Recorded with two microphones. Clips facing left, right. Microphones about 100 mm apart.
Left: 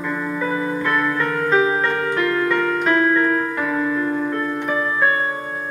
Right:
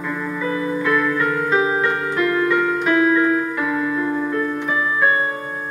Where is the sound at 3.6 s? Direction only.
15° right (ahead or behind).